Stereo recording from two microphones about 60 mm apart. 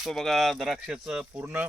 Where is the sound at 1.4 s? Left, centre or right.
Right.